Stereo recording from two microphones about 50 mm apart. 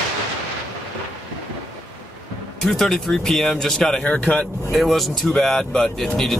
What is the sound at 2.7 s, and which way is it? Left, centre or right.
Speech, centre.